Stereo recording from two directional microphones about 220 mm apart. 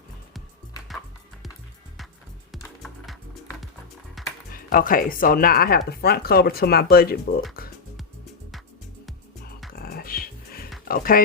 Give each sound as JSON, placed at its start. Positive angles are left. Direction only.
{"t": 4.2, "sound": "music", "side_deg": 0}
{"t": 4.5, "sound": "speech", "side_deg": 40}
{"t": 9.7, "sound": "music", "side_deg": 45}
{"t": 10.8, "sound": "speech", "side_deg": 40}